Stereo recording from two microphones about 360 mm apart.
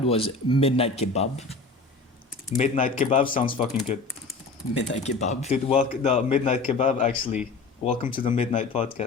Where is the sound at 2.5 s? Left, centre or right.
Centre.